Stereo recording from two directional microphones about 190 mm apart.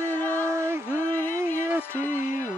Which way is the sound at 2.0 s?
40° left (ahead or behind).